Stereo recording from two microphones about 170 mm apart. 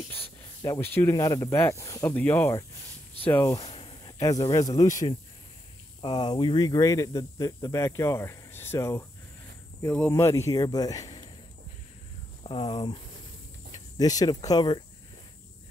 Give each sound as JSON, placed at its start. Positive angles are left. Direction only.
{"t": 0.1, "sound": "a sound", "side_deg": 35}
{"t": 0.7, "sound": "speech", "side_deg": 10}
{"t": 3.6, "sound": "speech", "side_deg": 35}
{"t": 12.4, "sound": "speech", "side_deg": 30}